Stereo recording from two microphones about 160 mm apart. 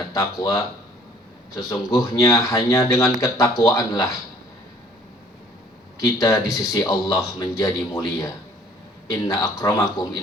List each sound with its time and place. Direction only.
0.1 s speech: 20° left (ahead or behind)
2.0 s speech: 20° left (ahead or behind)
6.0 s speech: 20° left (ahead or behind)